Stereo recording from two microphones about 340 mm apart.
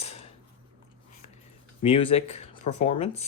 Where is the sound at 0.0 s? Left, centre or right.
Centre.